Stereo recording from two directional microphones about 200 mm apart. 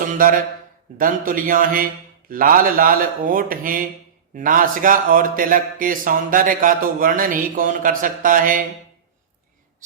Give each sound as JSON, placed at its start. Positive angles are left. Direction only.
{"t": 0.9, "sound": "speech", "side_deg": -45}